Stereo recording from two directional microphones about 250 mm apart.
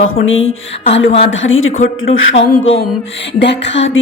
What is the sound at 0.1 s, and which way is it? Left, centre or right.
Rub, left.